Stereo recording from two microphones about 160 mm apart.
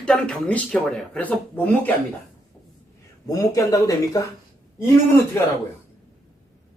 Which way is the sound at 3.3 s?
20° left (ahead or behind).